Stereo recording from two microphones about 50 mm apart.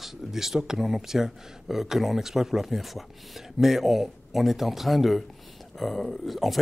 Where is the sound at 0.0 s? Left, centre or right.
Centre.